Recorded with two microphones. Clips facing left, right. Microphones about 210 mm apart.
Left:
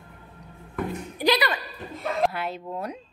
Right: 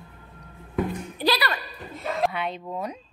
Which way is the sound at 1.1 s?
15° left (ahead or behind).